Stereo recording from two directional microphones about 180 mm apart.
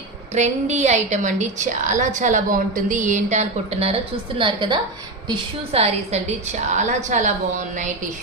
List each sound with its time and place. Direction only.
0.3 s a woman's voice: 40° right (ahead or behind)